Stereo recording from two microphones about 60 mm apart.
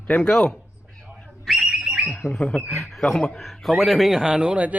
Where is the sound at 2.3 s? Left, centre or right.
Centre.